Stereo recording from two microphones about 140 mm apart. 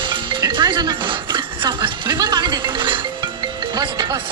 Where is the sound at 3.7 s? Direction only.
35° right (ahead or behind).